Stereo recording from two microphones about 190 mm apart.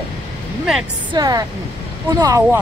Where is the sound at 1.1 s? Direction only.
20° right (ahead or behind).